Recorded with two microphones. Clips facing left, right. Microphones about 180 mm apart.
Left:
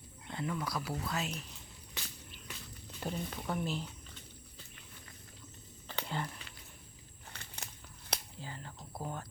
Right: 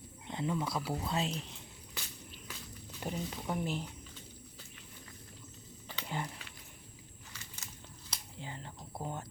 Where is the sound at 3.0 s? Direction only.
15° right (ahead or behind).